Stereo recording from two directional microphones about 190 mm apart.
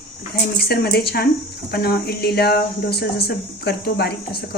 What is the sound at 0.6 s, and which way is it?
Speech, 55° left (ahead or behind).